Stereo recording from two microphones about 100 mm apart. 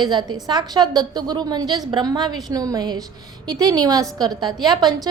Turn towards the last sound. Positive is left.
turn(degrees=-45)  # may be behind; listen again after turning